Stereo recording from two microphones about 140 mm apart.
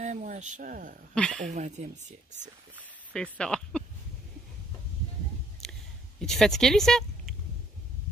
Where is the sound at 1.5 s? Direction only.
55° right (ahead or behind).